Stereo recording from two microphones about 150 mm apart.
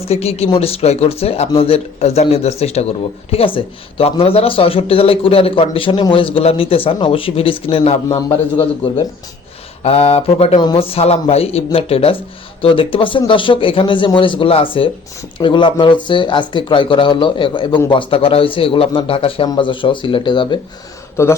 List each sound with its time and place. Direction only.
0.1 s a man's voice: 45° left (ahead or behind)
9.8 s a man's voice: 40° left (ahead or behind)